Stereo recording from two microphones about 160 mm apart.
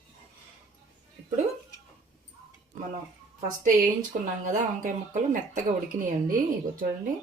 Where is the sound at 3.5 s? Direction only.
55° right (ahead or behind).